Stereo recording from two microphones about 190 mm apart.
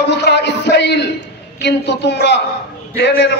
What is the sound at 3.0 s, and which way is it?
Speech, 65° left (ahead or behind).